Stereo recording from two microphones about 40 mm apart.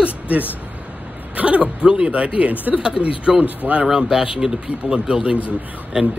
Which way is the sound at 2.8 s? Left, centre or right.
Right.